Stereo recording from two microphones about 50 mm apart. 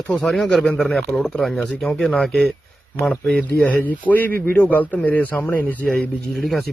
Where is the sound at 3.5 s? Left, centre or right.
Left.